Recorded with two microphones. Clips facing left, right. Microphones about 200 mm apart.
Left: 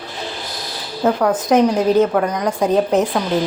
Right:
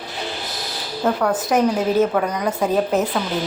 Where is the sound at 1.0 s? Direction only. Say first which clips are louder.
Left 4 dB; centre (ahead or behind).